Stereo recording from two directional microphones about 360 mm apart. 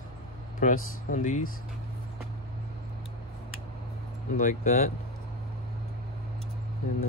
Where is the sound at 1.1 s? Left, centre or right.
Left.